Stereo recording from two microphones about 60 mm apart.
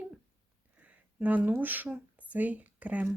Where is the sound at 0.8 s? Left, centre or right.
Right.